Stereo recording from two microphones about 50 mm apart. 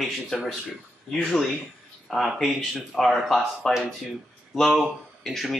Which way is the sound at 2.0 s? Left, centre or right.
Centre.